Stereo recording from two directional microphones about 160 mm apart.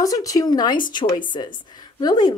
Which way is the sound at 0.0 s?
20° left (ahead or behind).